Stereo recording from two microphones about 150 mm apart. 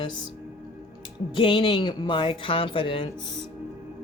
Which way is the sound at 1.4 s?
35° left (ahead or behind).